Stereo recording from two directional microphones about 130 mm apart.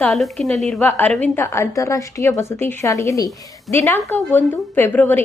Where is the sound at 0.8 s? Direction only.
15° left (ahead or behind).